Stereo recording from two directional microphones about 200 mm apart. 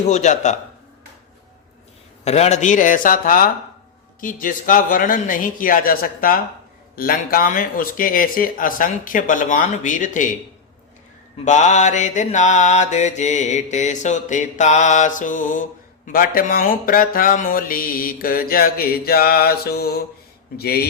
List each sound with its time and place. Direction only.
0.1 s mantra: 35° left (ahead or behind)
2.2 s mantra: 35° left (ahead or behind)
4.2 s speech: 45° left (ahead or behind)
11.4 s mantra: 35° left (ahead or behind)
16.0 s speech: 45° left (ahead or behind)